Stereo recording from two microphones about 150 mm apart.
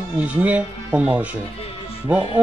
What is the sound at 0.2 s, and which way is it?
Speech, 10° right (ahead or behind).